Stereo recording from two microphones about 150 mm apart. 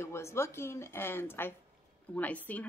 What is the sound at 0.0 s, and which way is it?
A woman's voice, 20° left (ahead or behind).